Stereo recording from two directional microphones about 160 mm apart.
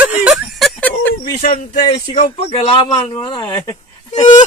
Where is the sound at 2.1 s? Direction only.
40° left (ahead or behind).